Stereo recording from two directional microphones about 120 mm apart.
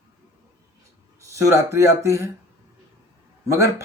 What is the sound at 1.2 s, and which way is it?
Speech, 25° right (ahead or behind).